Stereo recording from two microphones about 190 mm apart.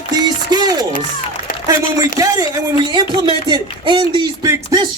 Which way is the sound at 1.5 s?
50° left (ahead or behind).